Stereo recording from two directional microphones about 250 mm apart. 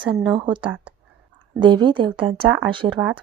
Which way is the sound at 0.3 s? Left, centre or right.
Centre.